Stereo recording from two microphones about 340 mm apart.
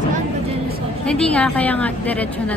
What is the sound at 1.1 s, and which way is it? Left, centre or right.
Speech, centre.